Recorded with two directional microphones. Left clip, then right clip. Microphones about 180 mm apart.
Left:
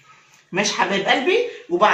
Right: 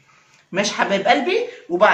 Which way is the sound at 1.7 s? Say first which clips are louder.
Right 2 dB; 15° right (ahead or behind).